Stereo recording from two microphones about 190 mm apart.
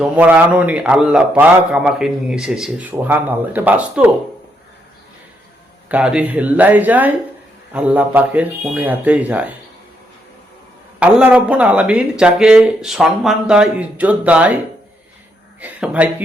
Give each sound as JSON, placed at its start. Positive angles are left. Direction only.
{"t": 0.0, "sound": "a man's voice", "side_deg": -10}
{"t": 5.9, "sound": "a man's voice", "side_deg": -5}
{"t": 11.0, "sound": "speech", "side_deg": -5}
{"t": 15.6, "sound": "a man's voice", "side_deg": -5}